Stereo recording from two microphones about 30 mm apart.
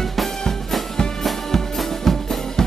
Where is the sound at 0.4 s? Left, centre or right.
Centre.